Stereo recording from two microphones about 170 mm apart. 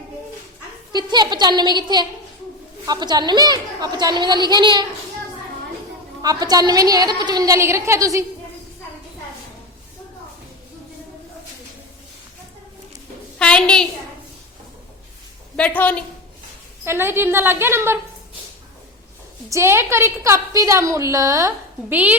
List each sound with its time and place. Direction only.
0.9 s a woman's voice: 25° right (ahead or behind)
6.2 s a woman's voice: 20° right (ahead or behind)
13.4 s a sound: 5° left (ahead or behind)
15.5 s a woman's voice: 10° left (ahead or behind)
16.8 s a woman's voice: 15° right (ahead or behind)
19.5 s a woman's voice: 15° right (ahead or behind)